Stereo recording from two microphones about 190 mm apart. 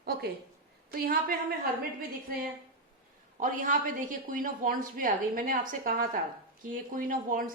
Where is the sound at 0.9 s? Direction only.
50° right (ahead or behind).